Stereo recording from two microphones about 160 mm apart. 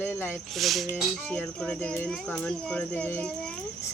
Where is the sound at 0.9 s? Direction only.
10° left (ahead or behind).